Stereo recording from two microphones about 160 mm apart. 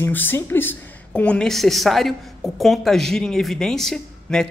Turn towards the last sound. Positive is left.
turn(degrees=5)  # may be behind; listen again after turning